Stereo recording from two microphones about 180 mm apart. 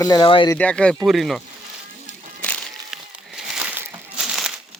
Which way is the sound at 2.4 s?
5° left (ahead or behind).